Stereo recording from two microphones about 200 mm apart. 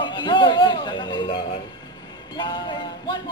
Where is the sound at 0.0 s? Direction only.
25° left (ahead or behind).